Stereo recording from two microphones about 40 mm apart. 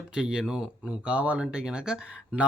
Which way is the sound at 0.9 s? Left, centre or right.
Right.